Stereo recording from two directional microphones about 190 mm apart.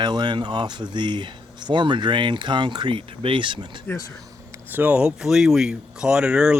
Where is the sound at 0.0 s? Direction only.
25° right (ahead or behind).